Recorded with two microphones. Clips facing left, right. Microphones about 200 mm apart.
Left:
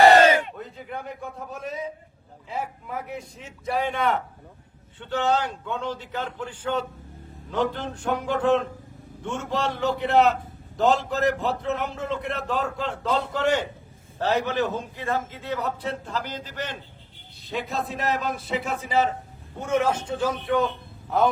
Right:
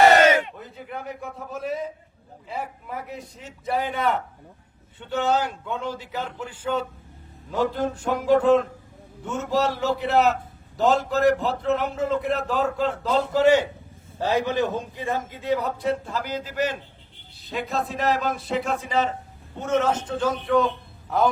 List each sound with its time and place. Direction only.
0.2 s battle cry: 35° left (ahead or behind)
0.5 s a man's voice: centre (ahead or behind)